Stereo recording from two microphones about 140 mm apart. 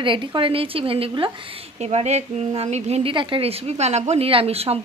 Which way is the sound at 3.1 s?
35° right (ahead or behind).